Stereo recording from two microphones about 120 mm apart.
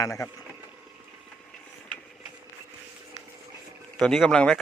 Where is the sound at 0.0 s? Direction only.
25° left (ahead or behind).